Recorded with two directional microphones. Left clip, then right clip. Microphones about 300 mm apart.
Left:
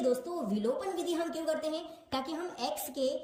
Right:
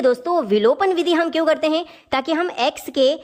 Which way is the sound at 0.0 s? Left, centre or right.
Centre.